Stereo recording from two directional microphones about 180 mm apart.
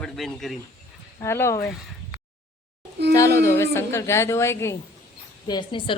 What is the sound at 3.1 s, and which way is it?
A woman's voice, 15° left (ahead or behind).